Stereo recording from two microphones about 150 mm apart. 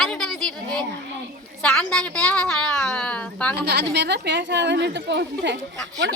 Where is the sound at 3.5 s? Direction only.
90° right.